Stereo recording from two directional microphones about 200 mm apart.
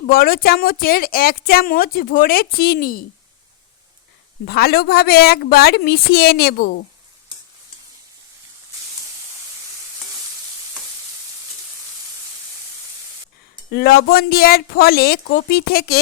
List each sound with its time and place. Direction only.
0.1 s a woman's voice: 45° left (ahead or behind)
4.4 s a woman's voice: 50° left (ahead or behind)
13.7 s a woman's voice: 50° left (ahead or behind)